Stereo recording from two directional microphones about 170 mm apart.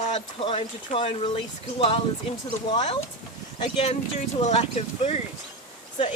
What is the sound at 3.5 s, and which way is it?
Speech, 35° left (ahead or behind).